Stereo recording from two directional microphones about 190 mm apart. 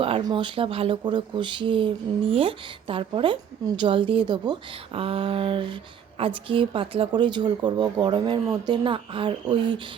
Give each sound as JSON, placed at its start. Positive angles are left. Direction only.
{"t": 0.0, "sound": "speech", "side_deg": -25}